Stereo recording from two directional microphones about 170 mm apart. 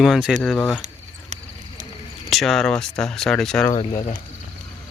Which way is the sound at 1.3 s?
40° right (ahead or behind).